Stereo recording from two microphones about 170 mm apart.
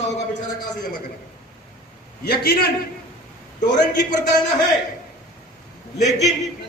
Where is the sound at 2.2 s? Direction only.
70° left (ahead or behind).